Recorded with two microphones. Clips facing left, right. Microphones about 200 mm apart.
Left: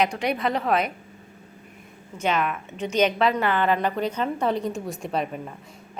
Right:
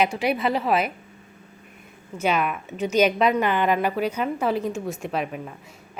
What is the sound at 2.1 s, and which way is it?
A woman's voice, 10° right (ahead or behind).